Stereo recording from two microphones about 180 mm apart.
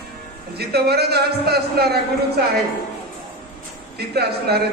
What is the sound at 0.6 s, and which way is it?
A man's voice, 65° right (ahead or behind).